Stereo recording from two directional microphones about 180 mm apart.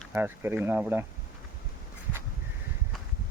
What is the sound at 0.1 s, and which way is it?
Speech, 10° right (ahead or behind).